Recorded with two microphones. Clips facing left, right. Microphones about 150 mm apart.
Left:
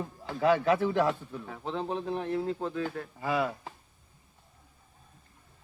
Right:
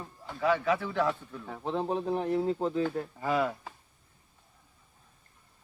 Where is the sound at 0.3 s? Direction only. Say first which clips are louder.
Left 3 dB; 35° left (ahead or behind).